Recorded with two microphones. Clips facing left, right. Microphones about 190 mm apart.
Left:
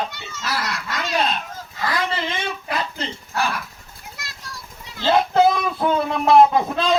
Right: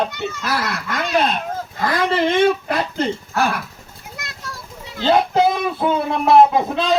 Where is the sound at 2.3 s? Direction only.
55° right (ahead or behind).